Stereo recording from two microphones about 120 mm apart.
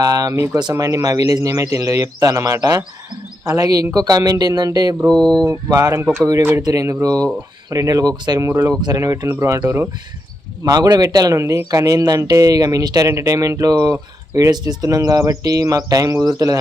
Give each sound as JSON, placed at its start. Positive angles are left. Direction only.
{"t": 0.0, "sound": "speech", "side_deg": -30}
{"t": 0.3, "sound": "speech", "side_deg": -20}
{"t": 5.0, "sound": "a sound", "side_deg": 5}
{"t": 5.5, "sound": "speech", "side_deg": -30}
{"t": 8.4, "sound": "speech", "side_deg": -20}